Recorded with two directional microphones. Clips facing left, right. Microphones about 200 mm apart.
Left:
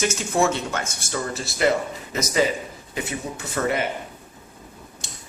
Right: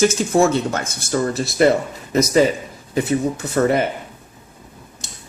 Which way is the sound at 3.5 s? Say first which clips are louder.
Right 7 dB; 40° right (ahead or behind).